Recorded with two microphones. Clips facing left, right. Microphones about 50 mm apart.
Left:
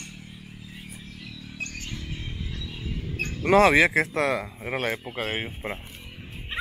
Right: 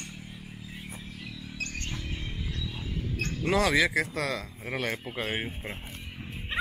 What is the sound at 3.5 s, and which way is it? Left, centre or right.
Speech, left.